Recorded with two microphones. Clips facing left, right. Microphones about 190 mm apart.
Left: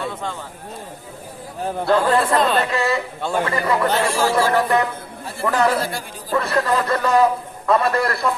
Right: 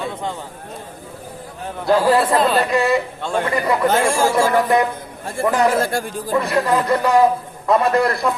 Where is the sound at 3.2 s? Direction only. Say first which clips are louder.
Even; 5° left (ahead or behind).